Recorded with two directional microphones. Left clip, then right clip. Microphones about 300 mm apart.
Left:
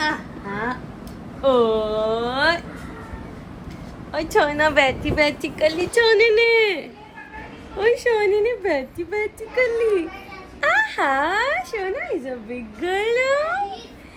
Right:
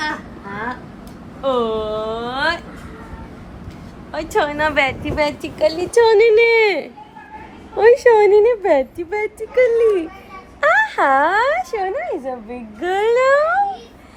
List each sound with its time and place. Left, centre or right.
0.0 s a sound: centre
4.1 s a woman's voice: centre
5.2 s a woman's voice: centre